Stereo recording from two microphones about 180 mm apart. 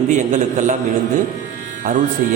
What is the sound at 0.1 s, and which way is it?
Speech, 40° right (ahead or behind).